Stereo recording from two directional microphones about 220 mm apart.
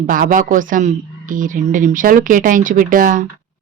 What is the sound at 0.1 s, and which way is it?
Speech, 40° right (ahead or behind).